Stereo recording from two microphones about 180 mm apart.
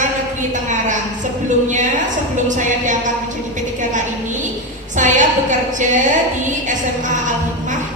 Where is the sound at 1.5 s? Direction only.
45° right (ahead or behind).